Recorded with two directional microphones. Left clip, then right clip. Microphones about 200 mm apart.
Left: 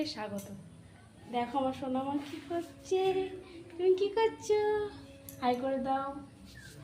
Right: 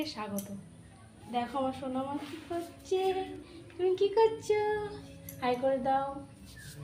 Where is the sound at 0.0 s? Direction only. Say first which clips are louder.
Left 1 dB; 10° left (ahead or behind).